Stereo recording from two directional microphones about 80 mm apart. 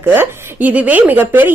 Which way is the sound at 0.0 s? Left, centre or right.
Right.